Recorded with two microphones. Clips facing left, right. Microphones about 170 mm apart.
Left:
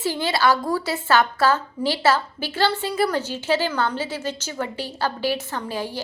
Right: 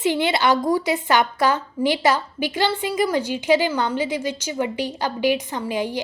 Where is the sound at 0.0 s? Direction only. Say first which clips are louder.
Right 2 dB; 20° right (ahead or behind).